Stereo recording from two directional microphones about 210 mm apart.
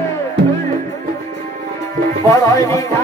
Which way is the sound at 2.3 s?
15° left (ahead or behind).